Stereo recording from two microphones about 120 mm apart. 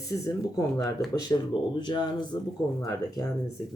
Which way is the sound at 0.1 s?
20° left (ahead or behind).